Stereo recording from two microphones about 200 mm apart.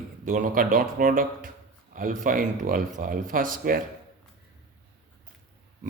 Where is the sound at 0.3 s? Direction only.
45° right (ahead or behind).